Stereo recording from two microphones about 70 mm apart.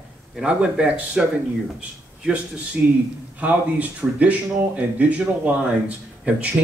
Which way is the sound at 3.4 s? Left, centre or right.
Right.